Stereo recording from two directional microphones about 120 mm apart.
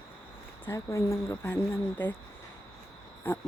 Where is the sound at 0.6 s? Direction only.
25° left (ahead or behind).